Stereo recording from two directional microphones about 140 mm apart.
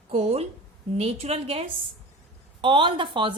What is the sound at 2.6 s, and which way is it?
Speech, 35° right (ahead or behind).